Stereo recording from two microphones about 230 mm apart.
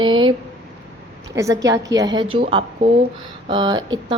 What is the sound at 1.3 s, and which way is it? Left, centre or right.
A woman's voice, centre.